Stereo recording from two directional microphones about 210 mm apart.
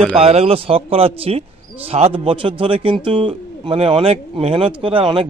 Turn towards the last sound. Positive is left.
turn(degrees=-25)  # may be behind; listen again after turning